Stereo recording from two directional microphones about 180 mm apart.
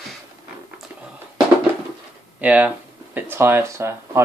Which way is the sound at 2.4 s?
5° right (ahead or behind).